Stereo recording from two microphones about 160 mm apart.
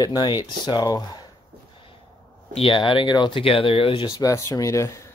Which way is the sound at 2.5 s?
35° left (ahead or behind).